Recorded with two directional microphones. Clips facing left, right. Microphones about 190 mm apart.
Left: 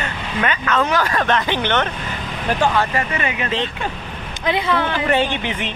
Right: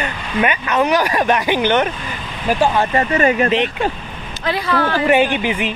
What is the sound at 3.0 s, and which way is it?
Speech, 40° right (ahead or behind).